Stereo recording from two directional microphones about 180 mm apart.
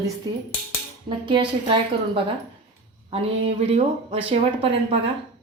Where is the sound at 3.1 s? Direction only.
30° right (ahead or behind).